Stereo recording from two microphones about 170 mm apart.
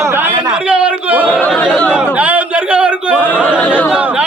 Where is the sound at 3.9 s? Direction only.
5° right (ahead or behind).